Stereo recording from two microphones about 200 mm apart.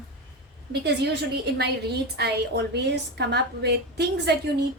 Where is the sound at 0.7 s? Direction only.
55° right (ahead or behind).